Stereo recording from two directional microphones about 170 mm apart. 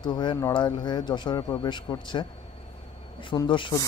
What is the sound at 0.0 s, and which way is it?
Speech, 25° left (ahead or behind).